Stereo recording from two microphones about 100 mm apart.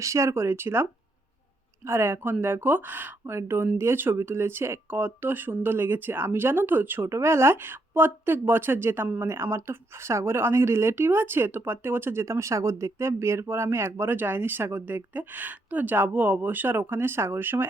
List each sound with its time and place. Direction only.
0.0 s speech: 30° right (ahead or behind)